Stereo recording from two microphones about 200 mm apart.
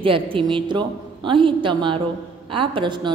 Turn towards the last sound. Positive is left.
turn(degrees=-25)  # may be behind; listen again after turning